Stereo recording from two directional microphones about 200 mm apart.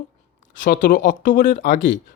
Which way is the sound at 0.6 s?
45° left (ahead or behind).